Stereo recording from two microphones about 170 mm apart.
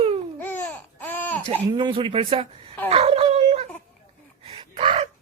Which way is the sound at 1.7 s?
25° right (ahead or behind).